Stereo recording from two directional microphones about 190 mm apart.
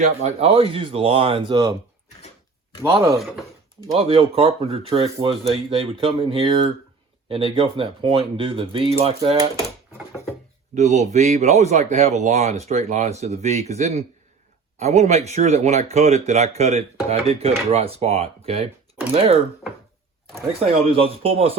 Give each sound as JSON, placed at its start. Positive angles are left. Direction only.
{"t": 0.0, "sound": "speech", "side_deg": -35}
{"t": 2.8, "sound": "a man's voice", "side_deg": -15}
{"t": 3.9, "sound": "speech", "side_deg": -30}
{"t": 10.8, "sound": "speech", "side_deg": -35}
{"t": 20.5, "sound": "speech", "side_deg": -30}